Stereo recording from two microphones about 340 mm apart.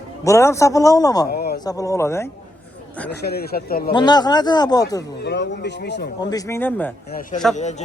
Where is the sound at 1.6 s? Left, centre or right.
Centre.